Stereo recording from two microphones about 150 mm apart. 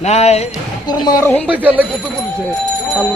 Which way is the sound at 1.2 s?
15° left (ahead or behind).